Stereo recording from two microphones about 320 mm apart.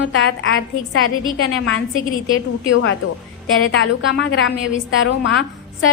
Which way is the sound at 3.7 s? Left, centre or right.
Left.